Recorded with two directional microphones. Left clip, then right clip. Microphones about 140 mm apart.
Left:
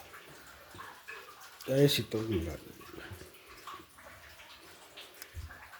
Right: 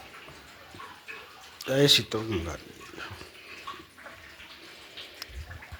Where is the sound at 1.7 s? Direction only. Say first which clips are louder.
Right 6 dB; 15° left (ahead or behind).